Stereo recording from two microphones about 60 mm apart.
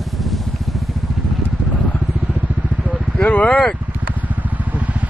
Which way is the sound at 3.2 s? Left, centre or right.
Left.